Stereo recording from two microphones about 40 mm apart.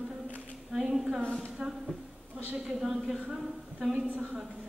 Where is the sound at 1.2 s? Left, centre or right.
Left.